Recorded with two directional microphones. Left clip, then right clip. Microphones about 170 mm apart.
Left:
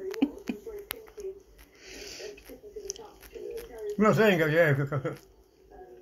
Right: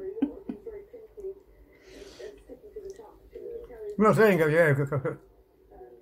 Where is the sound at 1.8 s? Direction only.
10° left (ahead or behind).